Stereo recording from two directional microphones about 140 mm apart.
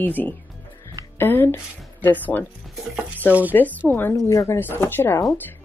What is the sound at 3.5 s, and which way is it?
Speech, 10° left (ahead or behind).